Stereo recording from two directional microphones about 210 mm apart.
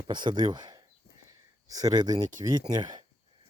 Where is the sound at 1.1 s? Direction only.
50° left (ahead or behind).